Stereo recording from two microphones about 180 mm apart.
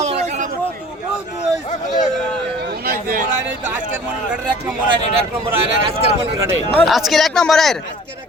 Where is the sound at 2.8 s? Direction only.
55° right (ahead or behind).